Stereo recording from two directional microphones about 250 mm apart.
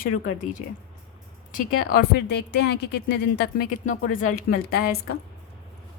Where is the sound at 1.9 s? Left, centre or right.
Left.